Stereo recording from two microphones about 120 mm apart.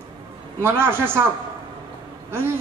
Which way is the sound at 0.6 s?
20° right (ahead or behind).